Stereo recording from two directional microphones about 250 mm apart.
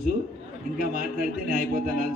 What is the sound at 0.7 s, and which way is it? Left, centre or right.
A man's voice, right.